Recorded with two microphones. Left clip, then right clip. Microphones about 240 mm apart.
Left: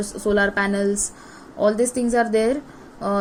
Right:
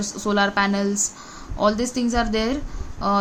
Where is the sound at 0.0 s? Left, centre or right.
Right.